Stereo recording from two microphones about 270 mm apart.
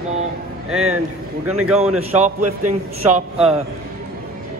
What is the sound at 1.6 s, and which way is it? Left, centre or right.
Speech, centre.